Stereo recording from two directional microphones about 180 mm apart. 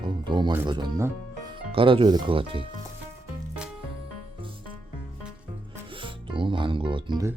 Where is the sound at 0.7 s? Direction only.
20° right (ahead or behind).